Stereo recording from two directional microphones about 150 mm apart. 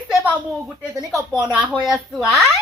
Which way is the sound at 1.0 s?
25° right (ahead or behind).